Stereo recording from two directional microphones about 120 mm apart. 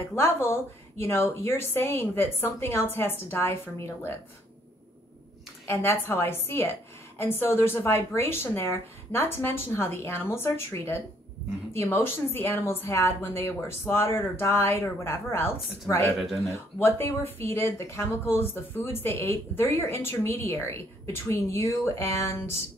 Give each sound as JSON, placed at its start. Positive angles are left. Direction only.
{"t": 0.0, "sound": "speech", "side_deg": 20}
{"t": 5.7, "sound": "speech", "side_deg": 20}